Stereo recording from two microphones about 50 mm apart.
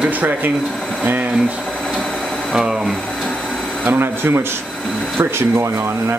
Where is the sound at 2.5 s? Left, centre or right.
Centre.